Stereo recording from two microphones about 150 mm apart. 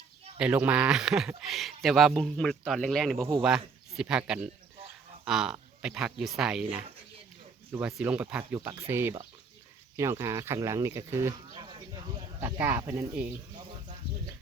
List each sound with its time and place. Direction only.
0.3 s speech: 10° right (ahead or behind)
7.7 s speech: 5° right (ahead or behind)